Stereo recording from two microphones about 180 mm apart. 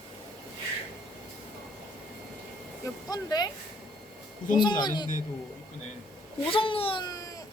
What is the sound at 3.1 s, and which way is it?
Speech, 20° left (ahead or behind).